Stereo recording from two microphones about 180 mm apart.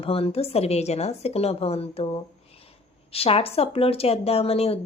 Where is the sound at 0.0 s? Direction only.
30° left (ahead or behind).